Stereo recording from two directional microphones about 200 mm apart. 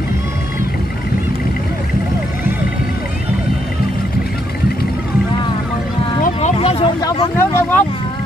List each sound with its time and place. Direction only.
6.2 s vehicle: 30° left (ahead or behind); by 7.8 s 10° left (ahead or behind)